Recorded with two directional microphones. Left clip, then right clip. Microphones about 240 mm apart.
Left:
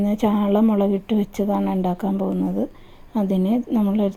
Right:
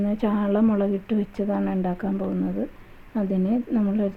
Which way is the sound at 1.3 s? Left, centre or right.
Centre.